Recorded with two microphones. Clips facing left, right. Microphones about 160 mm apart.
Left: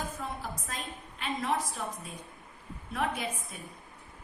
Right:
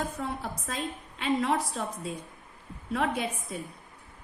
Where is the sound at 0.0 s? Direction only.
65° right (ahead or behind).